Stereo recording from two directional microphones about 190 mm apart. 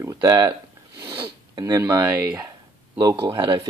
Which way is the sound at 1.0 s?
25° right (ahead or behind).